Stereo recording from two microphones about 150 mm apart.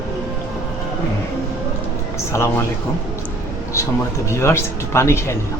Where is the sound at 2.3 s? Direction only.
20° left (ahead or behind).